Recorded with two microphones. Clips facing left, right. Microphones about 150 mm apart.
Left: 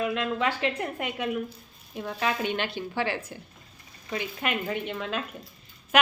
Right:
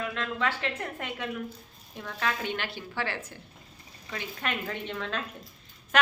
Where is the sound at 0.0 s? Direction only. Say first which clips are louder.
Left 4 dB; 15° left (ahead or behind).